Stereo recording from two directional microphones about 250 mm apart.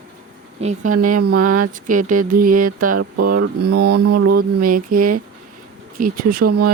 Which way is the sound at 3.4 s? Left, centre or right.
Right.